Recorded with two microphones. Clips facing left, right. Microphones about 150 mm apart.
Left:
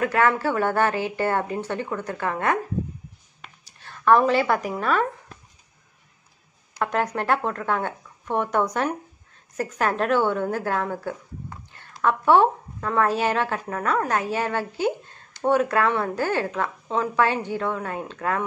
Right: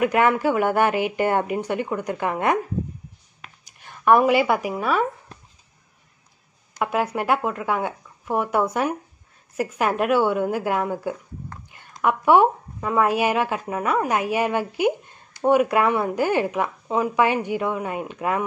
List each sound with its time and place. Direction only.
0.0 s a woman's voice: 15° right (ahead or behind)
3.6 s speech: 15° right (ahead or behind)
6.8 s a woman's voice: 10° right (ahead or behind)